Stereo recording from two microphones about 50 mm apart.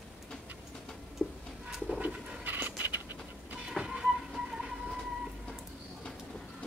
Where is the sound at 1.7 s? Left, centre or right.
Centre.